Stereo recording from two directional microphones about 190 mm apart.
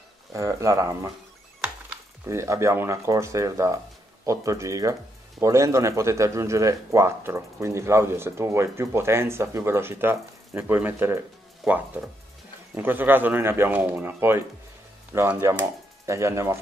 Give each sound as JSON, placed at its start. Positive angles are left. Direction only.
{"t": 0.3, "sound": "speech", "side_deg": -15}
{"t": 2.2, "sound": "speech", "side_deg": -15}